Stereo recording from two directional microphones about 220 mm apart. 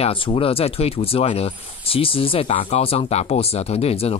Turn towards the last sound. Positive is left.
turn(degrees=25)  # may be behind; listen again after turning